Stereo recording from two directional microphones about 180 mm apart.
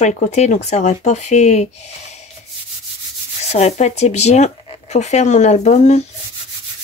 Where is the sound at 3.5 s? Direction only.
35° left (ahead or behind).